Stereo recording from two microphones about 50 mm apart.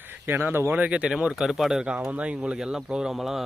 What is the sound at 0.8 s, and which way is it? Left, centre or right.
Speech, right.